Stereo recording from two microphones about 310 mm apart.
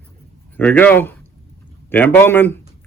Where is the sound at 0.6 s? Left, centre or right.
Centre.